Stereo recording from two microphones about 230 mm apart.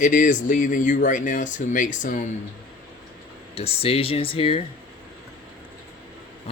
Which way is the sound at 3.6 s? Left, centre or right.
Left.